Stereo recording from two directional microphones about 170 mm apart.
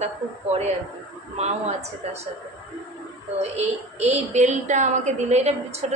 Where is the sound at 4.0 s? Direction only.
40° right (ahead or behind).